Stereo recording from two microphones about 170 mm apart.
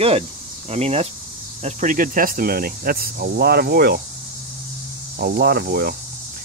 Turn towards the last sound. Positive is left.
turn(degrees=-65)  # may be behind; listen again after turning